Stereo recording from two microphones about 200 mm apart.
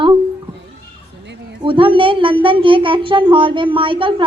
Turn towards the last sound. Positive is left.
turn(degrees=-25)  # may be behind; listen again after turning